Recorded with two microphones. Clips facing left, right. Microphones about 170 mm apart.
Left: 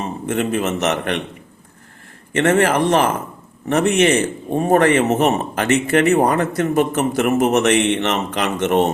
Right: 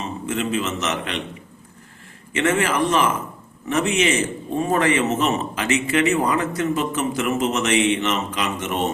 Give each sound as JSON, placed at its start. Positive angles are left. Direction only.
{"t": 0.0, "sound": "a man's voice", "side_deg": 55}
{"t": 2.3, "sound": "speech", "side_deg": 60}